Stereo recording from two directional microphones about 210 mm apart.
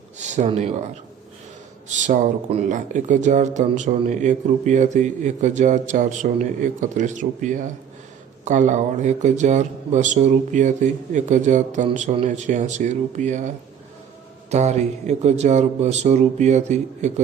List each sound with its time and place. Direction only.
0.2 s speech: 35° right (ahead or behind)
1.9 s speech: 35° right (ahead or behind)
14.5 s speech: 30° right (ahead or behind)